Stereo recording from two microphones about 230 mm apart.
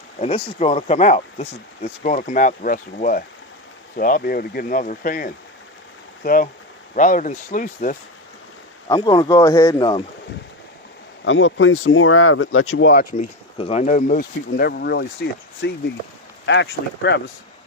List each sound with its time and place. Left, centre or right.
0.2 s speech: left
8.9 s speech: centre
11.3 s speech: left
12.9 s speech: left
13.6 s speech: left